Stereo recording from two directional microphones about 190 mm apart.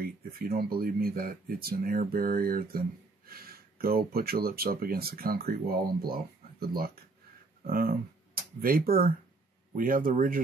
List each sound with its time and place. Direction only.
0.0 s speech: 50° right (ahead or behind)